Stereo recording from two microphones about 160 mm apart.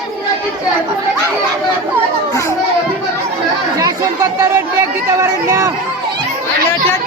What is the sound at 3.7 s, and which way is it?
Chatter, 20° right (ahead or behind).